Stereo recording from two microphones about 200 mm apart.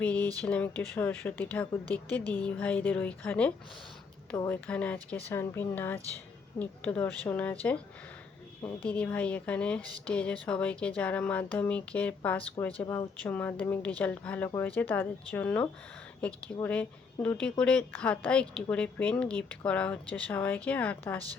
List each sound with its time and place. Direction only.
0.0 s speech: 10° left (ahead or behind)
8.6 s speech: 10° left (ahead or behind)